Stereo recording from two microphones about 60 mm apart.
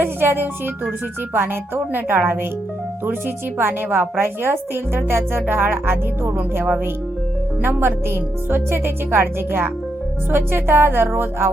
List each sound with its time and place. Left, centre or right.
0.0 s music: right